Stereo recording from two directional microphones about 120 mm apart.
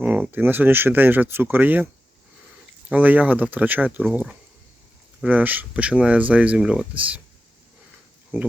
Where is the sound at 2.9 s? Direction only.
15° right (ahead or behind).